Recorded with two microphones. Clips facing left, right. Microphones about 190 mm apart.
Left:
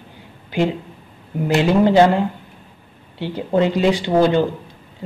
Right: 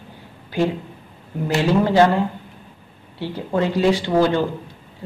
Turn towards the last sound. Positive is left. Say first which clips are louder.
# left 2 dB
turn(degrees=20)  # may be behind; listen again after turning